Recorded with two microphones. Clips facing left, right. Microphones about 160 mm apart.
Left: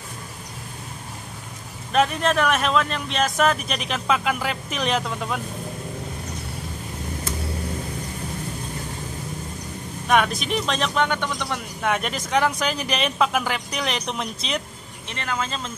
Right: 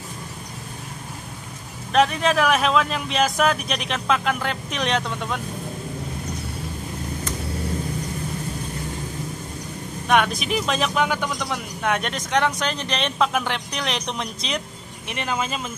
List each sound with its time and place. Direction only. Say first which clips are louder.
1.9 s speech: right 1 dB; centre (ahead or behind)
10.0 s speech: even; centre (ahead or behind)
15.0 s speech: right 2 dB; 15° right (ahead or behind)